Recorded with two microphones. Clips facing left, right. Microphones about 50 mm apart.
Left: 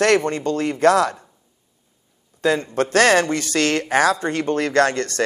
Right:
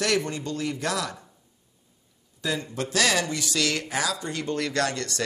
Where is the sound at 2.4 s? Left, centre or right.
Left.